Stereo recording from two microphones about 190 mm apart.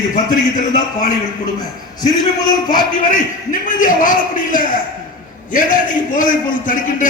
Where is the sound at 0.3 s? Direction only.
45° left (ahead or behind).